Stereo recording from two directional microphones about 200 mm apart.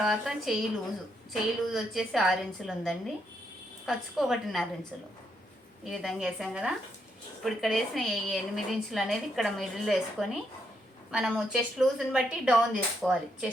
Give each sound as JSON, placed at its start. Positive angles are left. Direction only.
{"t": 0.0, "sound": "a woman's voice", "side_deg": 0}
{"t": 5.9, "sound": "a woman's voice", "side_deg": 0}